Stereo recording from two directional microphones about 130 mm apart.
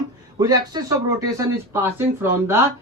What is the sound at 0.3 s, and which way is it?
Speech, 30° right (ahead or behind).